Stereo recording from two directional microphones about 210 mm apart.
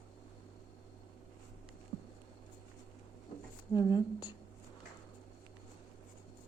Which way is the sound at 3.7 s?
20° left (ahead or behind).